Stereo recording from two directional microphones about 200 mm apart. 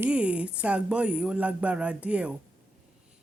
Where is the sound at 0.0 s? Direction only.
5° right (ahead or behind).